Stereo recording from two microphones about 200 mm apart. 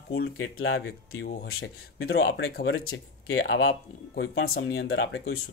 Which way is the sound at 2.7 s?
90° left.